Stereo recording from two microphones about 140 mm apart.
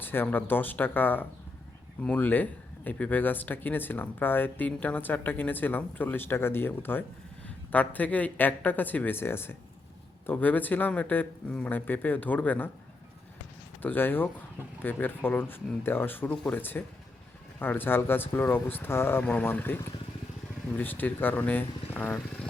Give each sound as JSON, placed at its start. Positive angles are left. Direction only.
{"t": 0.0, "sound": "speech", "side_deg": 15}
{"t": 13.8, "sound": "speech", "side_deg": 15}